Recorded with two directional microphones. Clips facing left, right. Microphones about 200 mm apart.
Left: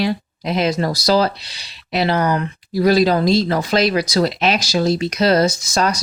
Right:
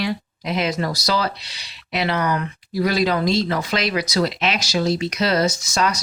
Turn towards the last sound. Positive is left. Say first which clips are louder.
# left 3 dB
turn(degrees=35)  # may be behind; listen again after turning